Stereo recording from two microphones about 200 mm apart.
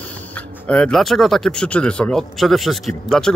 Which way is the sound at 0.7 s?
5° left (ahead or behind).